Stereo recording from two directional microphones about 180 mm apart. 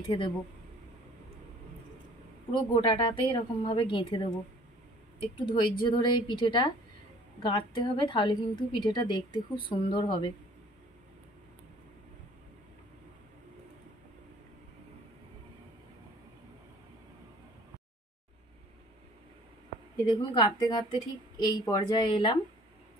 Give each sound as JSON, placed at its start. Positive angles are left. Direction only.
{"t": 0.0, "sound": "a woman's voice", "side_deg": 25}
{"t": 2.5, "sound": "a woman's voice", "side_deg": 30}
{"t": 5.4, "sound": "a woman's voice", "side_deg": 25}
{"t": 20.1, "sound": "a woman's voice", "side_deg": 25}